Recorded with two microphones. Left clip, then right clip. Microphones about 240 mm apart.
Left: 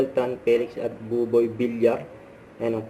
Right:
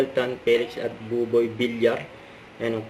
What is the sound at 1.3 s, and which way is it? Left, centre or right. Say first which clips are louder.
Speech: even; centre.